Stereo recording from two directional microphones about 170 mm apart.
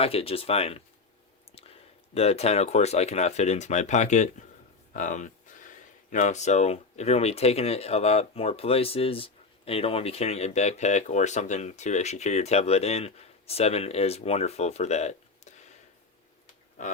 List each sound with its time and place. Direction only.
0.0 s speech: 35° left (ahead or behind)
16.8 s speech: 45° left (ahead or behind)